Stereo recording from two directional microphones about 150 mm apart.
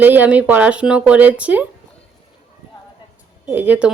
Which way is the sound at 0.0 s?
10° right (ahead or behind).